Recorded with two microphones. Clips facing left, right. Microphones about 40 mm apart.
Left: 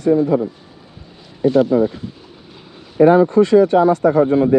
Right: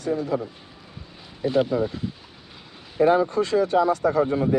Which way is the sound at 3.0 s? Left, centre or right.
Left.